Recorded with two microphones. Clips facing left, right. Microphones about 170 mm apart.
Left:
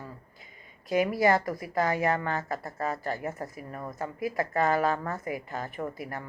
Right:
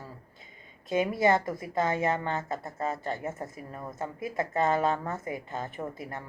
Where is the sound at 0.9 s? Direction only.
25° right (ahead or behind).